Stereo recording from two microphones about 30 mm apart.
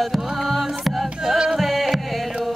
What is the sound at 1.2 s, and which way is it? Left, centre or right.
Music, centre.